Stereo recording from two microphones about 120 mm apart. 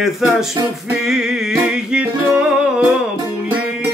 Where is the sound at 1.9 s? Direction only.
15° right (ahead or behind).